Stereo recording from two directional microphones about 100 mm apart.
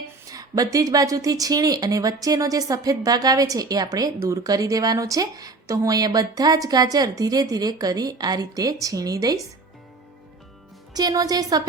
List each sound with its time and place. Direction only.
0.3 s speech: 40° right (ahead or behind)
10.9 s speech: 40° right (ahead or behind)